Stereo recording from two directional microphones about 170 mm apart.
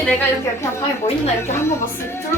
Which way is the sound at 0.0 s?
15° left (ahead or behind).